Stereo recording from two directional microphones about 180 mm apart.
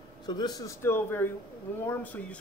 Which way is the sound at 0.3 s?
20° left (ahead or behind).